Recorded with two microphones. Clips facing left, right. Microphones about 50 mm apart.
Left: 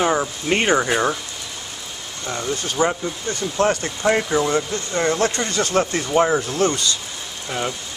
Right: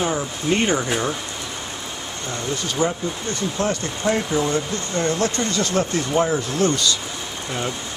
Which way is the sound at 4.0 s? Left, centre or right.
Left.